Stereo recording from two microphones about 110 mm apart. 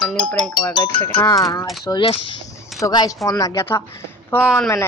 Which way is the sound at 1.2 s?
30° left (ahead or behind).